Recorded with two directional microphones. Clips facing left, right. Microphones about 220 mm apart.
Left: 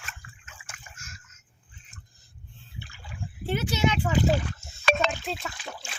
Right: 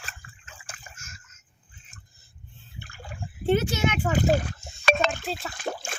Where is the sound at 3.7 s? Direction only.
45° right (ahead or behind).